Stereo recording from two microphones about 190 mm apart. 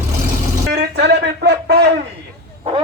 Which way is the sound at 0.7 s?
60° right (ahead or behind).